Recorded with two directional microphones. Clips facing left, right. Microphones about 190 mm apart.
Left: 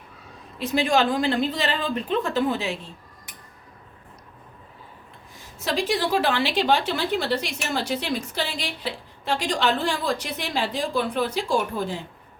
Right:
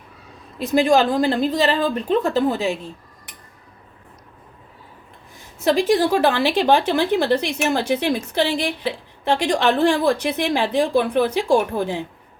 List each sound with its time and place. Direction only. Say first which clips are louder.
0.6 s a woman's voice: right 5 dB; 45° right (ahead or behind)
5.6 s a woman's voice: right 8 dB; 50° right (ahead or behind)